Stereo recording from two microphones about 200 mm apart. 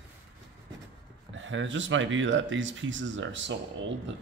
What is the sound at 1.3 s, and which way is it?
A man's voice, 70° right (ahead or behind).